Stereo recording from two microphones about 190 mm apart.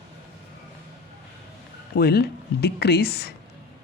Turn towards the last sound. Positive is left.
turn(degrees=55)  # may be behind; listen again after turning